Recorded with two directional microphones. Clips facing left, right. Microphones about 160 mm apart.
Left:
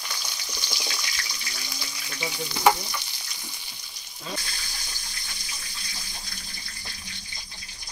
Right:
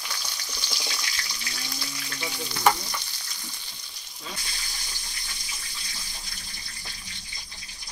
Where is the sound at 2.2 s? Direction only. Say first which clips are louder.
Left 2 dB; 15° left (ahead or behind).